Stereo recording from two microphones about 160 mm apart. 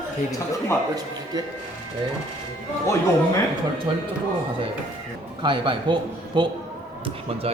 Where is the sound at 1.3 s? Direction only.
25° right (ahead or behind).